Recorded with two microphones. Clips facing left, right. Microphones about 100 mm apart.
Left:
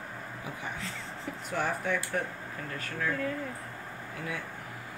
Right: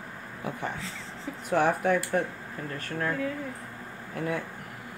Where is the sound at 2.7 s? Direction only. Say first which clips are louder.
Right 2 dB; 40° right (ahead or behind).